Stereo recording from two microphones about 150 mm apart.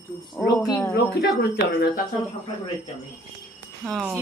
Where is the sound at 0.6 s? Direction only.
20° left (ahead or behind).